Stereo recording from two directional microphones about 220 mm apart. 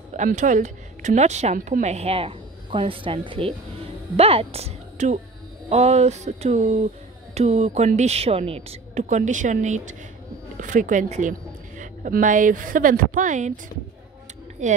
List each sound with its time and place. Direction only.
0.1 s a woman's voice: 35° right (ahead or behind)
14.6 s a woman's voice: 35° right (ahead or behind)